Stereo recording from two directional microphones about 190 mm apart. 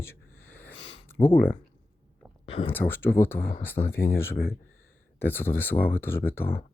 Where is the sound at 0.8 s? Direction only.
30° left (ahead or behind).